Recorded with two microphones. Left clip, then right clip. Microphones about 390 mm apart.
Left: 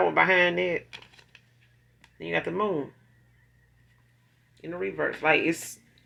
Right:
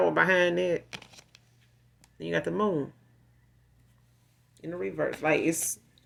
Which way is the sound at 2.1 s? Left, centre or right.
Right.